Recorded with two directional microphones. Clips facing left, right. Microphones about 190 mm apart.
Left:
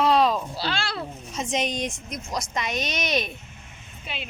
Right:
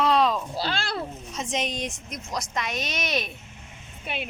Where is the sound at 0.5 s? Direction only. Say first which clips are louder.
Right 1 dB; 45° right (ahead or behind).